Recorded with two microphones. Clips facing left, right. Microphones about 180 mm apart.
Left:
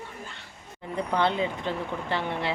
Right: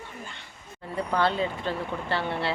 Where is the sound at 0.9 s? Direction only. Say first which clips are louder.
Even; 20° left (ahead or behind).